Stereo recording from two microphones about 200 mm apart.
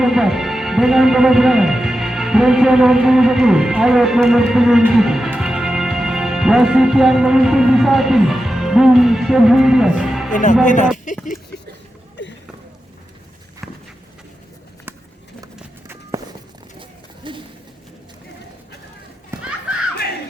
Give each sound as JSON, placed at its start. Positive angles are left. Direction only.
{"t": 0.0, "sound": "speech", "side_deg": 0}
{"t": 10.3, "sound": "speech", "side_deg": 40}
{"t": 10.9, "sound": "a sound", "side_deg": 40}
{"t": 13.6, "sound": "walk", "side_deg": 0}
{"t": 15.5, "sound": "run", "side_deg": -10}
{"t": 17.2, "sound": "a sound", "side_deg": -25}
{"t": 19.3, "sound": "children playing", "side_deg": -5}